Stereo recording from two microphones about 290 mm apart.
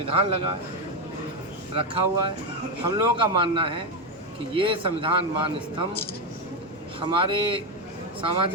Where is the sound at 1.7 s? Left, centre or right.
Centre.